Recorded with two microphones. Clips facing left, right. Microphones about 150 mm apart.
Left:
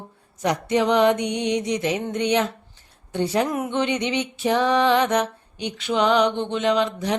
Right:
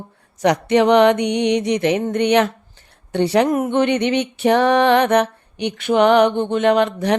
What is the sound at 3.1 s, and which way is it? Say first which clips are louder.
Mantra: right 6 dB; 70° right (ahead or behind).